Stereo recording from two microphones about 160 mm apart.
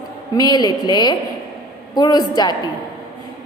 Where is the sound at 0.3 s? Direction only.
25° left (ahead or behind).